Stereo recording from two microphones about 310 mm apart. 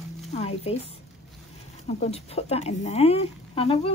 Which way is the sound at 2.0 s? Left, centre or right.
Centre.